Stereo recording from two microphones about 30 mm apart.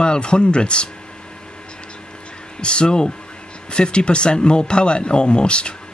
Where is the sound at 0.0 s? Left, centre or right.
Left.